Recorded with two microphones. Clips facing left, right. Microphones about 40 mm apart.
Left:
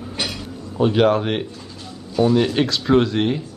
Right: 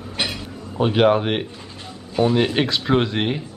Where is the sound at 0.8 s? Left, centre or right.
Centre.